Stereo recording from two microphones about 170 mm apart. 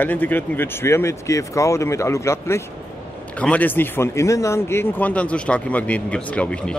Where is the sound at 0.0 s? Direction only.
10° left (ahead or behind).